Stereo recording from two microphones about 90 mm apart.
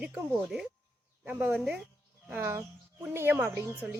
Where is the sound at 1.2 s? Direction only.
20° right (ahead or behind).